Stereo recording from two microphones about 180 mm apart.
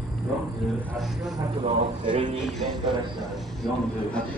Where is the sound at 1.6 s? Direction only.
25° right (ahead or behind).